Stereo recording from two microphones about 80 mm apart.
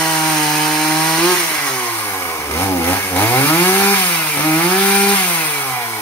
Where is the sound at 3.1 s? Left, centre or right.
Left.